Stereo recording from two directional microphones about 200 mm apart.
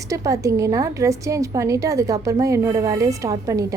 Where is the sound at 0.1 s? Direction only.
15° right (ahead or behind).